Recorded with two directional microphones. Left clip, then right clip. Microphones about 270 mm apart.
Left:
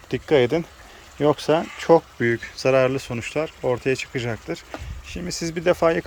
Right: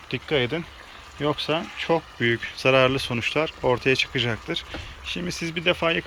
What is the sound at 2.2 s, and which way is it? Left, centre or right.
Speech, centre.